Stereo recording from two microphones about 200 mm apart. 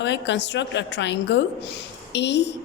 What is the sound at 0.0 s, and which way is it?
Speech, 60° left (ahead or behind).